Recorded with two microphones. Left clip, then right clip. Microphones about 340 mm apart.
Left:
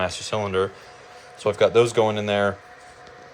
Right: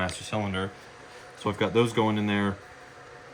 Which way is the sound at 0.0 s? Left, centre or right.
Centre.